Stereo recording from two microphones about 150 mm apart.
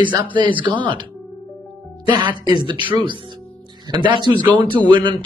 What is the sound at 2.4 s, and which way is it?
Speech, 30° right (ahead or behind).